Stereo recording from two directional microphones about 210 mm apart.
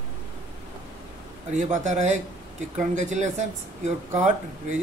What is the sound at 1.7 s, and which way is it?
Speech, 35° right (ahead or behind).